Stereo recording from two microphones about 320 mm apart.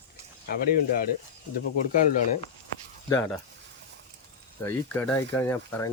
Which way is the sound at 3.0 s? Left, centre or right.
Centre.